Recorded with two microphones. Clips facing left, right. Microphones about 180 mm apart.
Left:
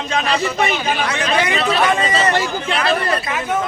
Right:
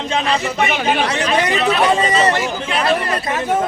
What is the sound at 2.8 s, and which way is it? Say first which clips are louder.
Speech: right 1 dB; 35° right (ahead or behind).